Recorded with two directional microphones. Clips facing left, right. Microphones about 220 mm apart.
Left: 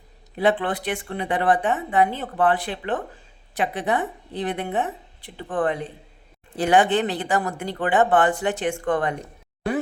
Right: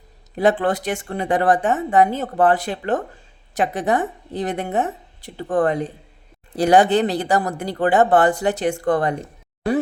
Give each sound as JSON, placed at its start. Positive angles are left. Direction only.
{"t": 0.3, "sound": "a woman's voice", "side_deg": -45}